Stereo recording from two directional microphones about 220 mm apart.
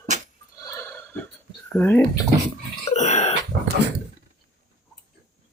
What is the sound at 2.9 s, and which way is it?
Burping, 30° left (ahead or behind).